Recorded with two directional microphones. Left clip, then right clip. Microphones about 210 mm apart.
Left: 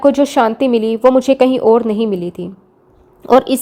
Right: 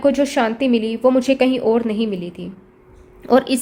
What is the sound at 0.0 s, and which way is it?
A woman's voice, 20° left (ahead or behind).